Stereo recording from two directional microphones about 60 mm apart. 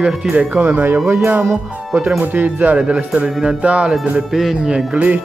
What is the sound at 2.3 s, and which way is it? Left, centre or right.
Speech, right.